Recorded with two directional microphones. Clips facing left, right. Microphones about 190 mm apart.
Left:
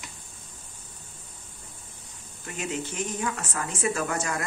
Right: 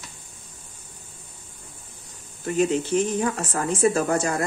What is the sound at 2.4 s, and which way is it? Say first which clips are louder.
Speech: right 11 dB; 35° right (ahead or behind).